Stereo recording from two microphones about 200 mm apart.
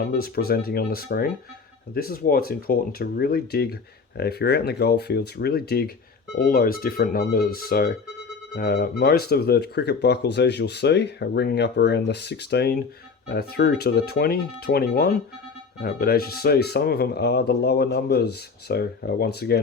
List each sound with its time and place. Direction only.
0.0 s speech: 50° left (ahead or behind)